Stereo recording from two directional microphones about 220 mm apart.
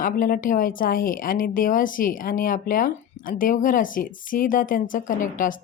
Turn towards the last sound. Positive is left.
turn(degrees=40)  # may be behind; listen again after turning